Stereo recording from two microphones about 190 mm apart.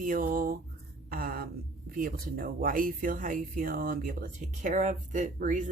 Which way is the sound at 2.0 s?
50° right (ahead or behind).